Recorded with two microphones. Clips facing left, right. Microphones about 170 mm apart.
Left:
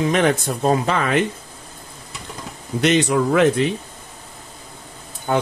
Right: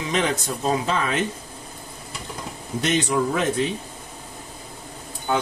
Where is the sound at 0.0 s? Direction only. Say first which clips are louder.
Left 6 dB; 55° left (ahead or behind).